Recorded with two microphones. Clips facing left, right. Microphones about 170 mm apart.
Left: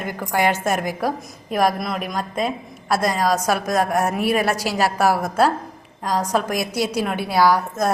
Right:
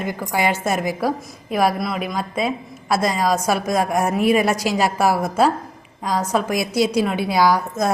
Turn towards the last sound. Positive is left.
turn(degrees=-15)  # may be behind; listen again after turning